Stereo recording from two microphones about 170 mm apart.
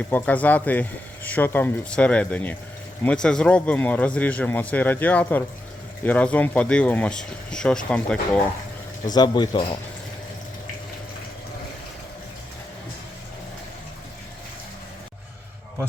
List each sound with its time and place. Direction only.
0.1 s speech: 10° left (ahead or behind)
9.1 s speech: 25° left (ahead or behind)